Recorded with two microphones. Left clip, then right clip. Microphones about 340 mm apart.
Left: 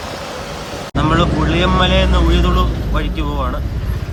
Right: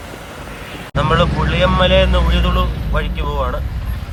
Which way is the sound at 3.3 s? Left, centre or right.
Right.